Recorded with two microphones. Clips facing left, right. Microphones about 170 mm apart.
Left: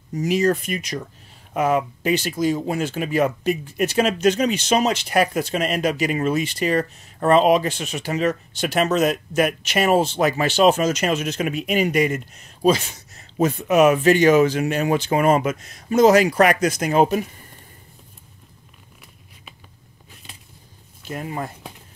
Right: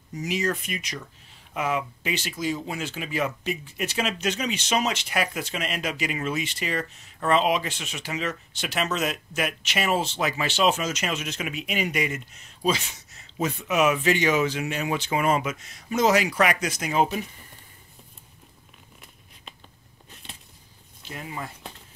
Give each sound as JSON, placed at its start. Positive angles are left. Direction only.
{"t": 0.1, "sound": "speech", "side_deg": 40}
{"t": 21.1, "sound": "speech", "side_deg": 50}